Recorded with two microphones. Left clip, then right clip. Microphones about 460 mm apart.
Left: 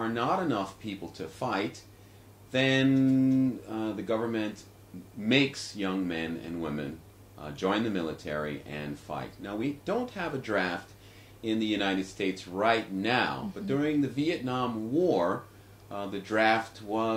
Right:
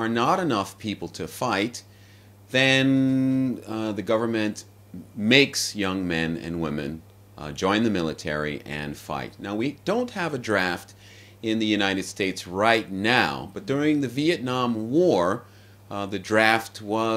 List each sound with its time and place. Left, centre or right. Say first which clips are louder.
0.0 s speech: right 6 dB; right